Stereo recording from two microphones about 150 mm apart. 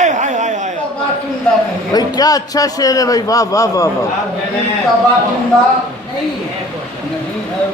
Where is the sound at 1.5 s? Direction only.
5° left (ahead or behind).